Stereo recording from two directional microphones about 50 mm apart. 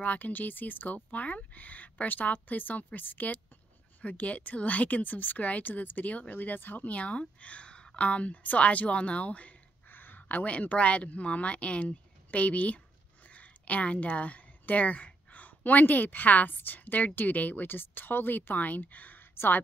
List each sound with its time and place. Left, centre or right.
0.0 s speech: left
9.8 s a woman's voice: left